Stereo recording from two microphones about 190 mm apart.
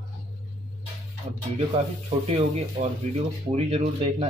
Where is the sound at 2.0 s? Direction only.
30° right (ahead or behind).